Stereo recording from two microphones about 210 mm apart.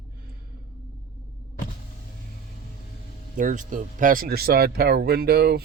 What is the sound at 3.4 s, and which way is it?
Speech, 40° right (ahead or behind).